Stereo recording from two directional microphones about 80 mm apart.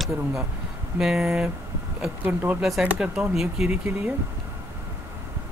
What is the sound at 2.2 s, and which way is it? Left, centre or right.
Speech, right.